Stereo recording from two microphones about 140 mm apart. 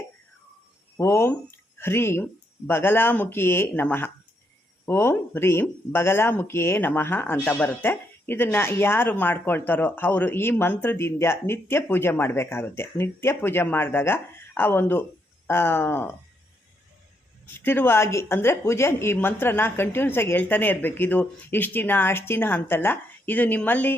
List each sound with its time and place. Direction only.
0.9 s speech: 20° left (ahead or behind)
17.4 s speech: 15° left (ahead or behind)